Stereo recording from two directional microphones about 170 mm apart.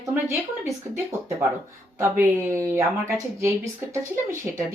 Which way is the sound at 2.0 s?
15° right (ahead or behind).